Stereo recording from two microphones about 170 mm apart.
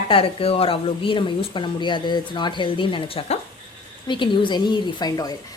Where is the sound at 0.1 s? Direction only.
35° left (ahead or behind).